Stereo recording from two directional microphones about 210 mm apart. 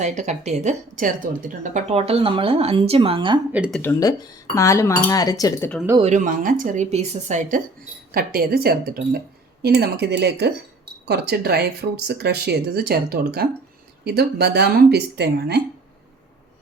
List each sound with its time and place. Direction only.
0.0 s speech: 35° right (ahead or behind)
3.5 s speech: 5° right (ahead or behind)
3.8 s speech: 15° left (ahead or behind)
6.0 s speech: 35° right (ahead or behind)
8.1 s speech: 45° right (ahead or behind)